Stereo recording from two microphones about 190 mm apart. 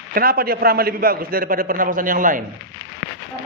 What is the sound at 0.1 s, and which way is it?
A man's voice, 50° right (ahead or behind).